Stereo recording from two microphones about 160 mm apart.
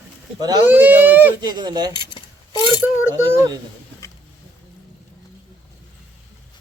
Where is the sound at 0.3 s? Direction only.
25° right (ahead or behind).